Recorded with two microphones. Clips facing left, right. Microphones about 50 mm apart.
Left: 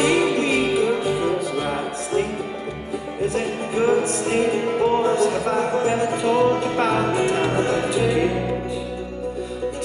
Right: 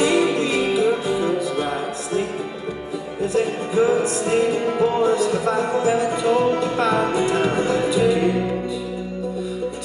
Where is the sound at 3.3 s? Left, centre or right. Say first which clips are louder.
Right 7 dB; left.